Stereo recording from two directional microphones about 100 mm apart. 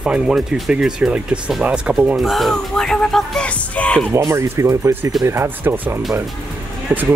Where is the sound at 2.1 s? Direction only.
Centre (ahead or behind).